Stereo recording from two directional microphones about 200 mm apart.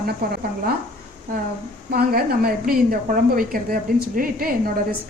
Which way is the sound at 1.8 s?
50° right (ahead or behind).